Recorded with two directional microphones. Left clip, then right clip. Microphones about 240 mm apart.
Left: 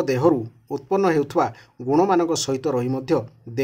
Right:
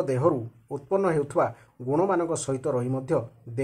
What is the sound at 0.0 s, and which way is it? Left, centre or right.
Speech, left.